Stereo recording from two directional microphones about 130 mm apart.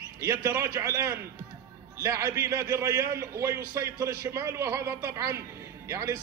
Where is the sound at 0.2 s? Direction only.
25° right (ahead or behind).